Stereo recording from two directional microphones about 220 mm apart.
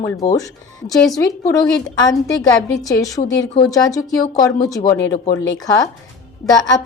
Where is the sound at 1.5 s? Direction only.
15° left (ahead or behind).